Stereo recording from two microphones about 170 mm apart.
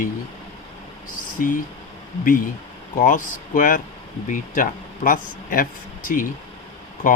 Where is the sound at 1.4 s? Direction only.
55° left (ahead or behind).